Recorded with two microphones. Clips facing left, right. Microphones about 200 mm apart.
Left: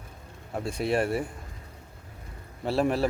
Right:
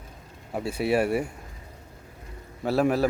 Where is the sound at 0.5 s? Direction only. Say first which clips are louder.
Right 3 dB; 5° right (ahead or behind).